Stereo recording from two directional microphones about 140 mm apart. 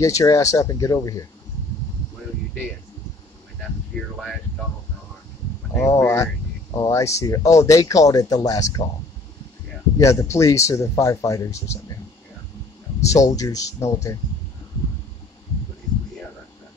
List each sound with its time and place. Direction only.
0.0 s speech: 25° left (ahead or behind)
5.8 s speech: 20° left (ahead or behind)
9.9 s speech: 20° left (ahead or behind)
13.0 s speech: 25° left (ahead or behind)